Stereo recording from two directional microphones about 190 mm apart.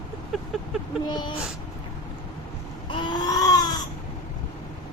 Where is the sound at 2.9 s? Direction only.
25° left (ahead or behind).